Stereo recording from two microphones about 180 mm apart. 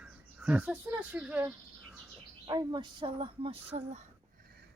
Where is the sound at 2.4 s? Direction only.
25° right (ahead or behind).